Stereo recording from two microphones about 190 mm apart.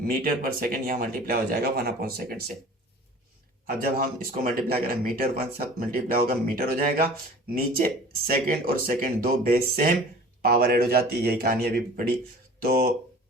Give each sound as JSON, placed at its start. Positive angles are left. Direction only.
{"t": 0.0, "sound": "speech", "side_deg": -50}
{"t": 3.7, "sound": "speech", "side_deg": -50}